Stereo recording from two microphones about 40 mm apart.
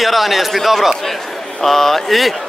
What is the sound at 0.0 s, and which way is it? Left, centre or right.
A man's voice, centre.